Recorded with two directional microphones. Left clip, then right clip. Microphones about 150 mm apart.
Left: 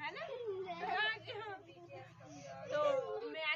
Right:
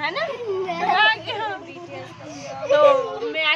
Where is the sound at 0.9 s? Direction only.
20° right (ahead or behind).